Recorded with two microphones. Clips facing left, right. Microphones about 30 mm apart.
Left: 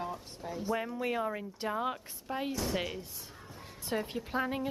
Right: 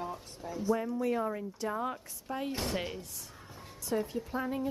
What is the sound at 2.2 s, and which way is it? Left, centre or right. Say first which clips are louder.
Speech: left 1 dB; left.